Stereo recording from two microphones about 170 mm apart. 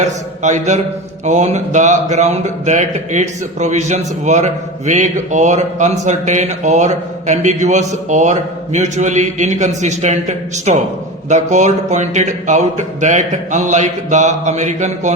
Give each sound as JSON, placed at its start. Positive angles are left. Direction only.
{"t": 0.0, "sound": "speech", "side_deg": -45}